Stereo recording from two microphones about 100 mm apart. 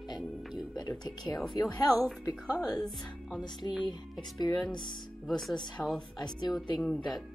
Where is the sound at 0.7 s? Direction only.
45° left (ahead or behind).